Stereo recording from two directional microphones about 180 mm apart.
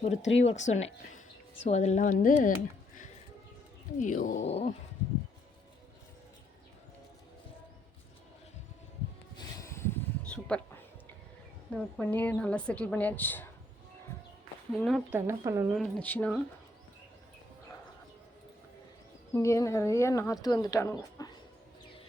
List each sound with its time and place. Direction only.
0.2 s speech: 90° left
0.4 s a woman's voice: 40° left (ahead or behind)
4.0 s a woman's voice: 50° left (ahead or behind)
9.6 s a sound: 15° left (ahead or behind)
11.8 s speech: 10° left (ahead or behind)
14.8 s speech: centre (ahead or behind)
15.1 s speech: 15° right (ahead or behind)
15.7 s speech: 5° left (ahead or behind)
19.3 s speech: 15° left (ahead or behind)